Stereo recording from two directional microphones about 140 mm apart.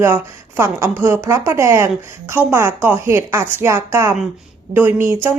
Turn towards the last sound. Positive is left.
turn(degrees=-15)  # may be behind; listen again after turning